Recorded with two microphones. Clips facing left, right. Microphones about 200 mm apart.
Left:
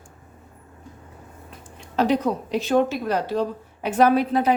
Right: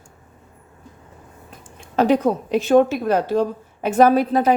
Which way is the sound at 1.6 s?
50° right (ahead or behind).